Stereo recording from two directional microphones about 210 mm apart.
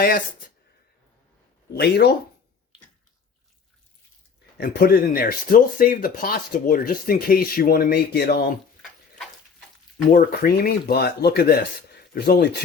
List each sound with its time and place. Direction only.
1.7 s speech: 50° left (ahead or behind)
4.5 s speech: 45° left (ahead or behind)
10.1 s speech: 45° left (ahead or behind)